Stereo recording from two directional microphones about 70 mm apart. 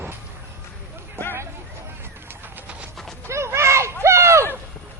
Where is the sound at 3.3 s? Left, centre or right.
Right.